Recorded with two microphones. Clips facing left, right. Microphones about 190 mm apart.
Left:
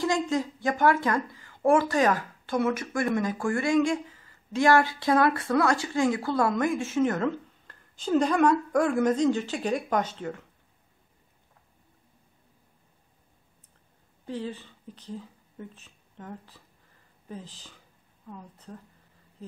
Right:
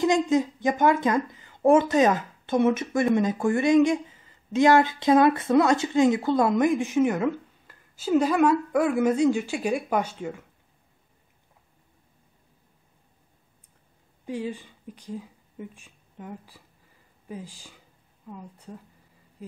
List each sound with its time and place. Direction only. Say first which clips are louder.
0.0 s speech: right 5 dB; 20° right (ahead or behind)
14.2 s a woman's voice: right 3 dB; 10° right (ahead or behind)